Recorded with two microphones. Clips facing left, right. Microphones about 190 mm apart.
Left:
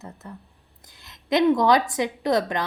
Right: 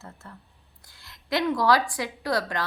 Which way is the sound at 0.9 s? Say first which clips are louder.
Left 5 dB; 20° left (ahead or behind).